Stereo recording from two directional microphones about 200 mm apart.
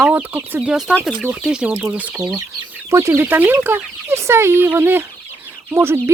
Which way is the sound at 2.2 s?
20° right (ahead or behind).